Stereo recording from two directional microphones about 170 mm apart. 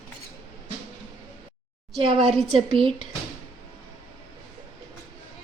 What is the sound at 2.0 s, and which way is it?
Speech, 35° right (ahead or behind).